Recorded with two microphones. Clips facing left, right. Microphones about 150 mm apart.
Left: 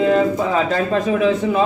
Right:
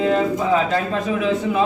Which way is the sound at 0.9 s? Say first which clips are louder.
Left 4 dB; 40° left (ahead or behind).